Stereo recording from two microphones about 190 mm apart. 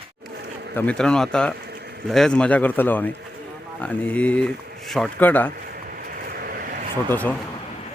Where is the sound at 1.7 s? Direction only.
60° right (ahead or behind).